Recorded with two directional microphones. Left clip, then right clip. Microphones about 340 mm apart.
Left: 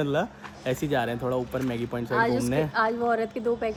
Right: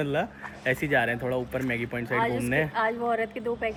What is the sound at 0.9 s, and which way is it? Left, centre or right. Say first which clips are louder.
Speech: right 2 dB; left.